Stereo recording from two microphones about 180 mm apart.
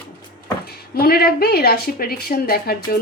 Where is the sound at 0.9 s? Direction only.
55° left (ahead or behind).